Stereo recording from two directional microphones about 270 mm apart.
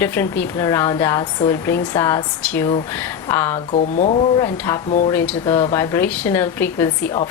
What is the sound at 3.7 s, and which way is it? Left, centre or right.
Speech, left.